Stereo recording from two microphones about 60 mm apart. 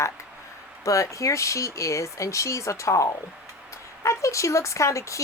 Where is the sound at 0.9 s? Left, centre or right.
Left.